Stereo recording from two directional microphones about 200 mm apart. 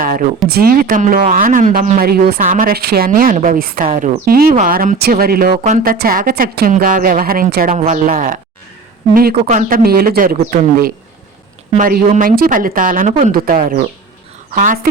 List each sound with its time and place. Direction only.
0.0 s a sound: 45° right (ahead or behind)
0.4 s speech: 50° right (ahead or behind)
5.5 s speech: 35° right (ahead or behind)